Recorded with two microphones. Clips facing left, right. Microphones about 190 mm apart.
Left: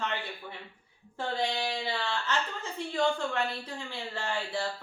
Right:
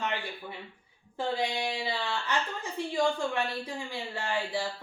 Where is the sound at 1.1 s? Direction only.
15° right (ahead or behind).